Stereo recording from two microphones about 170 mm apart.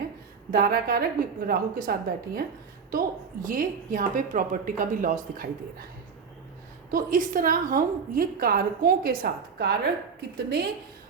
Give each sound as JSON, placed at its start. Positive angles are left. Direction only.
{"t": 0.5, "sound": "a woman's voice", "side_deg": -60}
{"t": 3.4, "sound": "a woman's voice", "side_deg": -50}
{"t": 6.9, "sound": "a woman's voice", "side_deg": -55}